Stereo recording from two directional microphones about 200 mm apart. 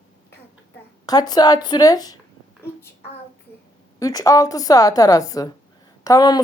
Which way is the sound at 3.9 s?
15° left (ahead or behind).